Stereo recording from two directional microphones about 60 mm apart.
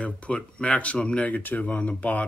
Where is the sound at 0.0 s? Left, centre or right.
Centre.